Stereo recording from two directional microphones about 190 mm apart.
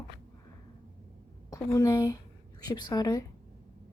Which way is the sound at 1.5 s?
15° left (ahead or behind).